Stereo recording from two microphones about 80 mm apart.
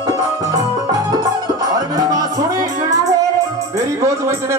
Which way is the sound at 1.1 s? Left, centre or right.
Right.